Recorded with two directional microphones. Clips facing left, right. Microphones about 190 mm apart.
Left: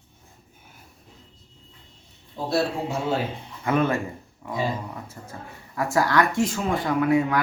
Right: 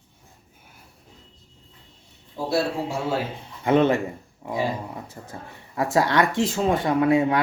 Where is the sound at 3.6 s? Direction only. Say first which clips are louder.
Right 4 dB; 25° right (ahead or behind).